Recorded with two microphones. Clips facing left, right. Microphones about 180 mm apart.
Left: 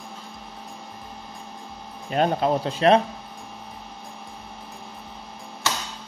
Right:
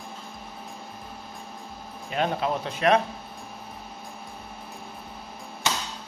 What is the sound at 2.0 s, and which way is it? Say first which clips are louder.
Speech: left 5 dB; 40° left (ahead or behind).